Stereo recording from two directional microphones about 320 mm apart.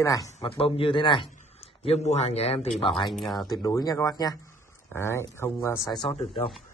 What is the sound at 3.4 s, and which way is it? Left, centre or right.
Speech, centre.